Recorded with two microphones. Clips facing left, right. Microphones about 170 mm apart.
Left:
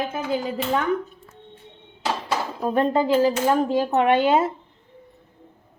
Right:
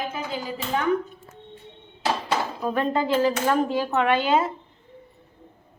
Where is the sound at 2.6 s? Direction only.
30° left (ahead or behind).